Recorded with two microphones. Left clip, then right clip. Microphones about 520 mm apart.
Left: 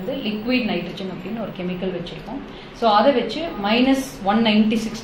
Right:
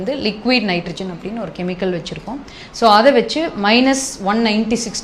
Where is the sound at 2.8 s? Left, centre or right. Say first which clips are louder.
Right 5 dB; right.